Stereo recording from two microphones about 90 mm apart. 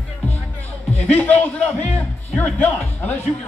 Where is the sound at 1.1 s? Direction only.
20° left (ahead or behind).